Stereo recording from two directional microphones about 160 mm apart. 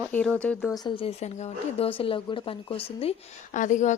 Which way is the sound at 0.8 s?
35° left (ahead or behind).